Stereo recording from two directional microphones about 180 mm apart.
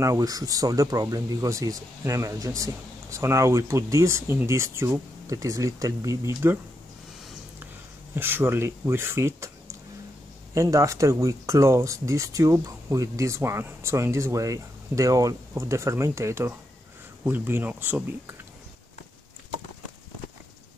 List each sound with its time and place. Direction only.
0.0 s speech: 20° right (ahead or behind)
8.1 s speech: 10° right (ahead or behind)